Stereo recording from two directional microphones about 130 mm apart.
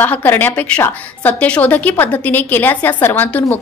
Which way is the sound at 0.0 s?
15° left (ahead or behind).